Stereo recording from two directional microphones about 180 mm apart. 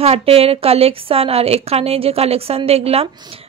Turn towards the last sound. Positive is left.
turn(degrees=-35)  # may be behind; listen again after turning